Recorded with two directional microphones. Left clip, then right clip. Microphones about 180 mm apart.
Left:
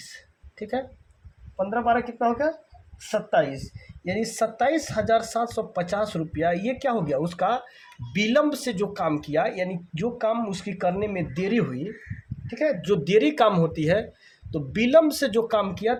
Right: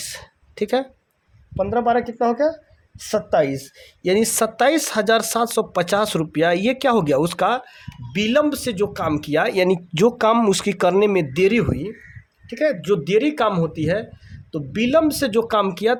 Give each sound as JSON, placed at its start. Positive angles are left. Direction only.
{"t": 0.0, "sound": "a sound", "side_deg": -55}
{"t": 1.5, "sound": "speech", "side_deg": -45}
{"t": 8.1, "sound": "speech", "side_deg": -25}
{"t": 11.4, "sound": "speech", "side_deg": -25}
{"t": 12.8, "sound": "speech", "side_deg": -15}